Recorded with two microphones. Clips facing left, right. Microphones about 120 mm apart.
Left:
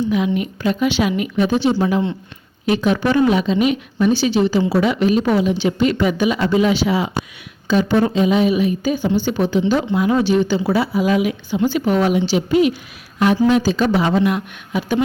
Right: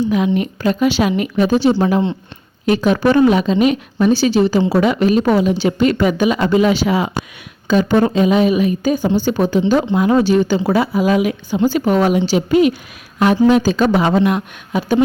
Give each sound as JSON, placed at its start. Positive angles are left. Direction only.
{"t": 0.0, "sound": "a woman's voice", "side_deg": -45}